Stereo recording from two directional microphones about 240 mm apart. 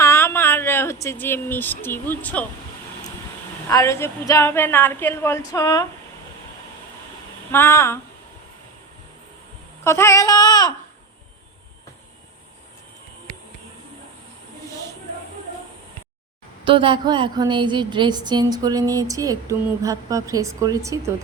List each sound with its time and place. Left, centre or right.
0.0 s speech: centre
3.7 s a woman's voice: centre
7.5 s a woman's voice: centre
9.8 s a sound: centre
16.6 s a woman's voice: right